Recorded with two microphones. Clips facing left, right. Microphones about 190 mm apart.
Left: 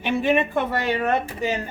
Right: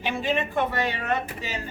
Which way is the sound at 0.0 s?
60° left (ahead or behind).